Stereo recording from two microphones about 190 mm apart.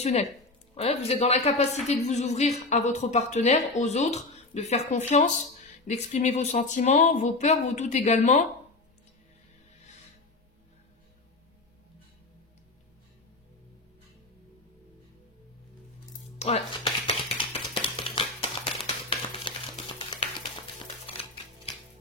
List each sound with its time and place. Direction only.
0.0 s a woman's voice: 35° left (ahead or behind)
16.3 s music: 35° left (ahead or behind)
17.0 s a sound: 25° left (ahead or behind)
20.8 s music: 30° left (ahead or behind)